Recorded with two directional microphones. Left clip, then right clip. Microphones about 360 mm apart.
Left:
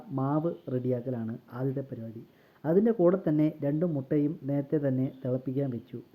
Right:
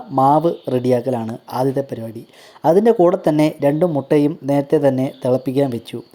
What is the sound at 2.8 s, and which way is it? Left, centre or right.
Speech, centre.